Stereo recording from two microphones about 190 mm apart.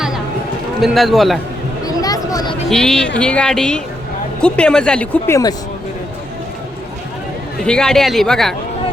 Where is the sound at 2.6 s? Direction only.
Centre (ahead or behind).